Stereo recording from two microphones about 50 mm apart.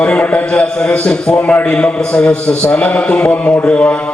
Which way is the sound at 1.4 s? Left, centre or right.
Left.